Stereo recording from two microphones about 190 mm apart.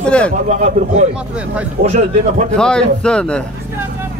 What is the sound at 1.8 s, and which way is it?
Speech, 55° right (ahead or behind).